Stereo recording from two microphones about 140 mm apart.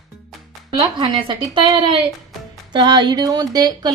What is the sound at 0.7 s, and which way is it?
Speech, 35° right (ahead or behind).